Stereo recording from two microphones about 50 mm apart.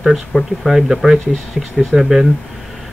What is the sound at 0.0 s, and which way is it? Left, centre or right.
Speech, centre.